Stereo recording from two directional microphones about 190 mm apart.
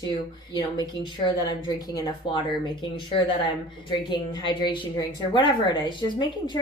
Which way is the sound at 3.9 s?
25° left (ahead or behind).